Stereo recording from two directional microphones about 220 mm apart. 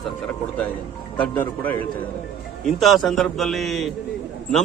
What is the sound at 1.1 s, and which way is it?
A man's voice, 5° left (ahead or behind).